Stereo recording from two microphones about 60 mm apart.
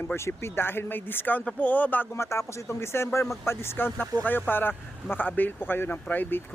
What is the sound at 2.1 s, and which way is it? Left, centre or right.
Speech, left.